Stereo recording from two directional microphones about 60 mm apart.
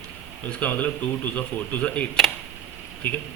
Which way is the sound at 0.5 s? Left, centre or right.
Left.